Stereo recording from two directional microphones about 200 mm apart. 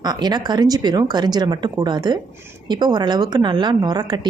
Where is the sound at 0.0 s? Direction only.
20° right (ahead or behind).